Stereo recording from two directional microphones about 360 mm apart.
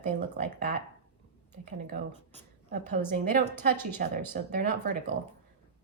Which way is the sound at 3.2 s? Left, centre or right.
Right.